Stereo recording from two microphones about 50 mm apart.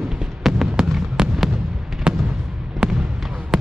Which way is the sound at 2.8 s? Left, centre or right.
Centre.